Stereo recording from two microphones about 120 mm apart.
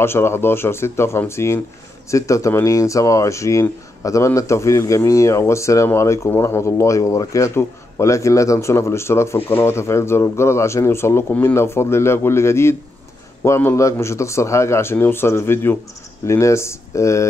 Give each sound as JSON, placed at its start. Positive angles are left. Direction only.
{"t": 0.0, "sound": "speech", "side_deg": 20}